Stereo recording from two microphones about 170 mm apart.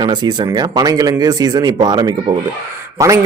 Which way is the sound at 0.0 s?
25° right (ahead or behind).